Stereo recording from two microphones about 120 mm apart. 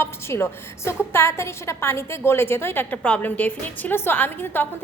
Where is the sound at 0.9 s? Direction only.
20° left (ahead or behind).